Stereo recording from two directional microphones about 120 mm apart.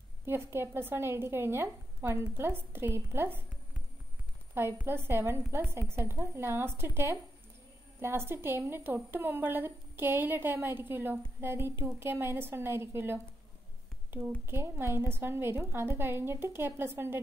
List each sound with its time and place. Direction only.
0.2 s a woman's voice: 20° right (ahead or behind)
4.7 s a woman's voice: 20° right (ahead or behind)